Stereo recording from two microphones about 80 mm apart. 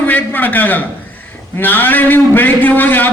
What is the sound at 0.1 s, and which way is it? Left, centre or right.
A man's voice, left.